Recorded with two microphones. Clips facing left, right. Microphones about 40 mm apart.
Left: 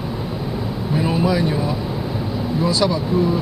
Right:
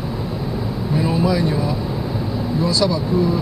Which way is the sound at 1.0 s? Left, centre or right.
Left.